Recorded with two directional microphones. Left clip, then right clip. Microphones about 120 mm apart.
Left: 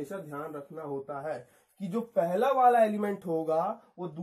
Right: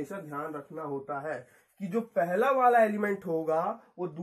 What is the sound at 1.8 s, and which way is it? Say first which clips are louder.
Speech: even; 15° left (ahead or behind).